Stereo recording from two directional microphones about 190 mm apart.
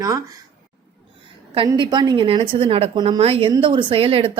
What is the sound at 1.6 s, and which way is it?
Speech, 25° right (ahead or behind).